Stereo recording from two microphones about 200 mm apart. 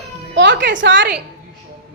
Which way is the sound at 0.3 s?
65° right (ahead or behind).